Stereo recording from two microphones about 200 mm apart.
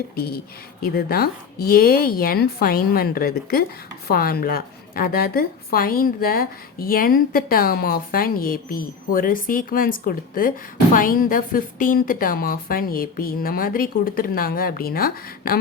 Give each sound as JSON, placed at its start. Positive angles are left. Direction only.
{"t": 0.2, "sound": "a woman's voice", "side_deg": 50}